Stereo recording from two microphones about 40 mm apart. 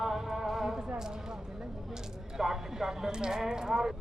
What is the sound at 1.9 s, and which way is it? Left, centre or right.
Speech, centre.